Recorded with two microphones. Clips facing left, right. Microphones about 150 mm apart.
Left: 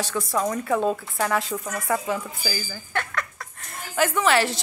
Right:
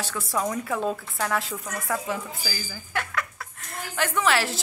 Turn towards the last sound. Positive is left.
turn(degrees=0)  # may be behind; listen again after turning